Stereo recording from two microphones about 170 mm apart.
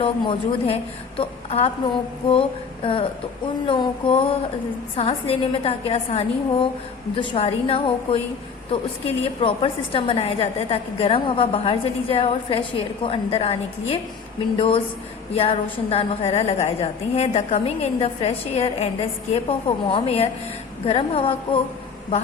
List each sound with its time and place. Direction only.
0.0 s a woman's voice: 30° left (ahead or behind)
15.3 s a woman's voice: 35° left (ahead or behind)